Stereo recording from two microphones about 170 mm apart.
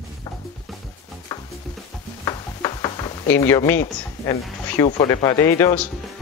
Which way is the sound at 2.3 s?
25° left (ahead or behind).